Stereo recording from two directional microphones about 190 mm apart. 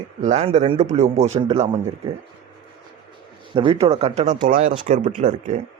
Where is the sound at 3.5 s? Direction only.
30° right (ahead or behind).